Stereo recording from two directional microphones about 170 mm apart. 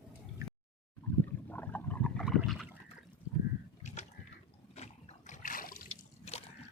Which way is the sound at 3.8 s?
45° left (ahead or behind).